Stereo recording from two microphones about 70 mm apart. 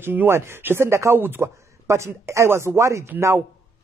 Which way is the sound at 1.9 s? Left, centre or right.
Right.